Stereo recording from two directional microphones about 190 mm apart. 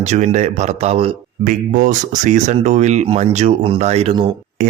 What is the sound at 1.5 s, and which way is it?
Speech, 45° right (ahead or behind).